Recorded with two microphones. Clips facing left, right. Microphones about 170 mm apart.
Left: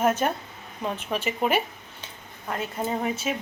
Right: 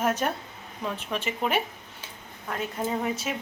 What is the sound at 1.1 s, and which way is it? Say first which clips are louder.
Speech: left 3 dB; 5° left (ahead or behind).